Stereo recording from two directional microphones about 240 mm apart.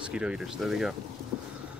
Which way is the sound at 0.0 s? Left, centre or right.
Centre.